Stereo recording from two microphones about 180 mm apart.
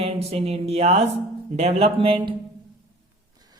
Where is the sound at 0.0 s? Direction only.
35° right (ahead or behind).